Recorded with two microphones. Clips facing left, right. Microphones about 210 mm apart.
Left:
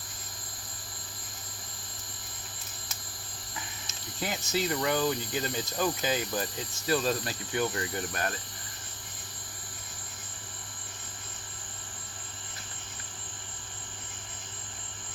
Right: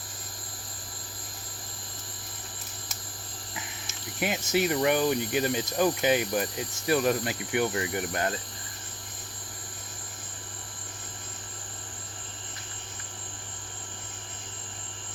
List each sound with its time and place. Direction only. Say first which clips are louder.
4.2 s speech: right 5 dB; 20° right (ahead or behind)